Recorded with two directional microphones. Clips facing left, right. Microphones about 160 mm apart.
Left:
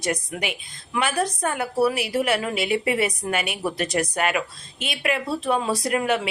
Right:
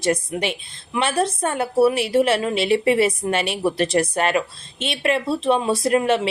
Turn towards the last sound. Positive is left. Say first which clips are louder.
# right 4 dB
turn(degrees=-25)  # may be behind; listen again after turning